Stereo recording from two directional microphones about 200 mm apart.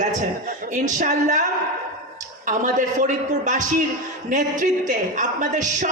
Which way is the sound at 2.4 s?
40° right (ahead or behind).